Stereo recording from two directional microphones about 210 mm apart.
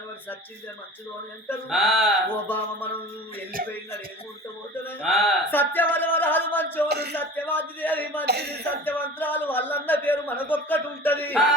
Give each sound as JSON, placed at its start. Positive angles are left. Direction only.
{"t": 1.7, "sound": "speech", "side_deg": 0}
{"t": 4.7, "sound": "speech", "side_deg": 10}
{"t": 5.0, "sound": "speech", "side_deg": 0}
{"t": 5.5, "sound": "speech", "side_deg": 10}
{"t": 6.8, "sound": "speech", "side_deg": -50}
{"t": 7.2, "sound": "speech", "side_deg": 10}
{"t": 8.2, "sound": "speech", "side_deg": -50}
{"t": 8.8, "sound": "speech", "side_deg": 10}